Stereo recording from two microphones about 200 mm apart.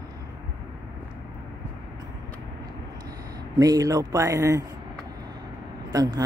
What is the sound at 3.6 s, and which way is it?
A man's voice, 15° right (ahead or behind).